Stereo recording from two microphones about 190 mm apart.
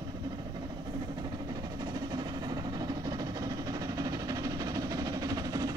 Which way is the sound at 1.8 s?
20° right (ahead or behind).